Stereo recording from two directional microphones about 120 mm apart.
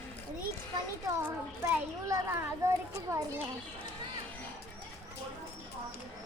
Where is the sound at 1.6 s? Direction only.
25° right (ahead or behind).